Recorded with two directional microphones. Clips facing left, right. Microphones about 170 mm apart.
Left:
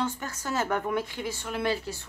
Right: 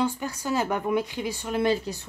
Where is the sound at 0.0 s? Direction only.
10° right (ahead or behind).